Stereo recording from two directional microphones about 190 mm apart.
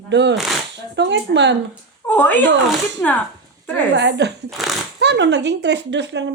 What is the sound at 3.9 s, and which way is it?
Speech, 60° right (ahead or behind).